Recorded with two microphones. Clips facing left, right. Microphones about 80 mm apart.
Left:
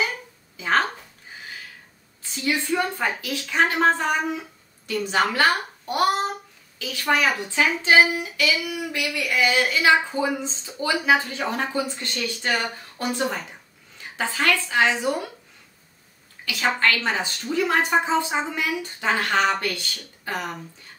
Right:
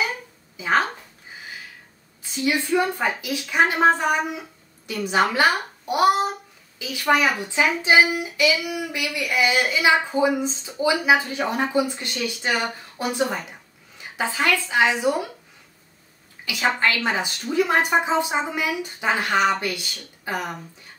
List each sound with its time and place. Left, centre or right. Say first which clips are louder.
0.6 s a sound: right 1 dB; centre
2.3 s a woman's voice: right 3 dB; centre
16.4 s speech: even; centre